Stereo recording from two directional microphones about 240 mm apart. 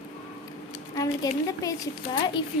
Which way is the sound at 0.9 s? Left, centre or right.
Centre.